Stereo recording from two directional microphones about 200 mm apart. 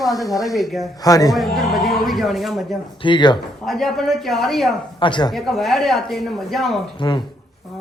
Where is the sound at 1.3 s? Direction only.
Centre (ahead or behind).